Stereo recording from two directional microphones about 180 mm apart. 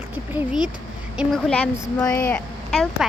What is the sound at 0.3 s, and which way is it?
A woman's voice, 5° right (ahead or behind).